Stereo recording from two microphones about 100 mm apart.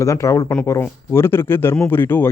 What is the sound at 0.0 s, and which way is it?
Speech, 30° left (ahead or behind).